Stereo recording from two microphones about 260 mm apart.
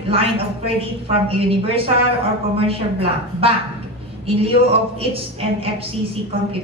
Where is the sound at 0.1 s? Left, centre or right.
Right.